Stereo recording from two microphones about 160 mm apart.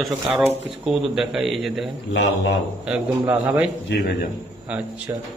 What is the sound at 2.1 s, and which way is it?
Speech, 90° left.